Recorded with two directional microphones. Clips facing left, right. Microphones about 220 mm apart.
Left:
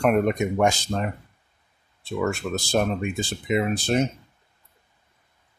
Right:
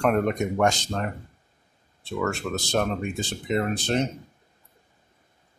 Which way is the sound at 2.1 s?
10° left (ahead or behind).